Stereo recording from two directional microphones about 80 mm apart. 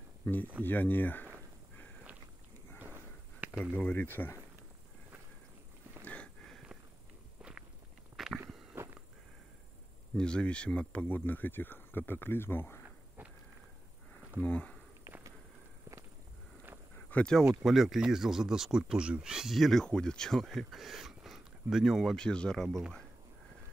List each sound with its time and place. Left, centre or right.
0.2 s speech: left
2.8 s sniff: right
3.7 s speech: centre
6.0 s a sound: centre
8.2 s a sound: centre
8.8 s a sound: right
10.1 s speech: centre; by 12.8 s left
14.4 s speech: centre
17.1 s speech: centre
17.6 s speech: centre
19.8 s speech: centre
22.1 s speech: centre